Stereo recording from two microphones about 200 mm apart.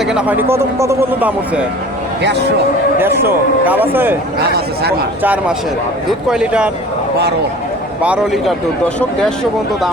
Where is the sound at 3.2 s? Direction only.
10° right (ahead or behind).